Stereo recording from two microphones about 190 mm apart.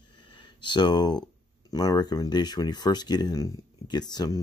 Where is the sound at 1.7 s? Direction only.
20° left (ahead or behind).